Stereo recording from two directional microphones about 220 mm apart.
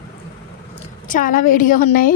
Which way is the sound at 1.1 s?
40° left (ahead or behind).